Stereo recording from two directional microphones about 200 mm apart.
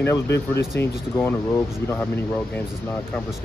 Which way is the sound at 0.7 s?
55° left (ahead or behind).